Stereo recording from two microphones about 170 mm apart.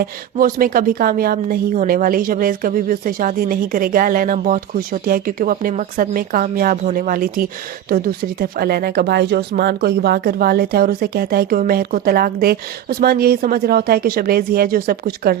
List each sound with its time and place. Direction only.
0.0 s speech: 55° right (ahead or behind)